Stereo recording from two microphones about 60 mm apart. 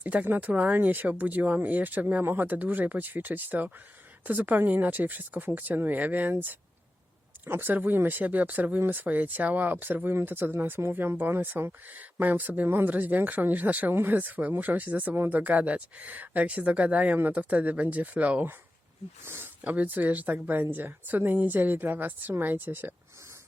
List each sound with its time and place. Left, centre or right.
0.0 s speech: right
10.5 s speech: right
19.2 s speech: right
19.6 s speech: right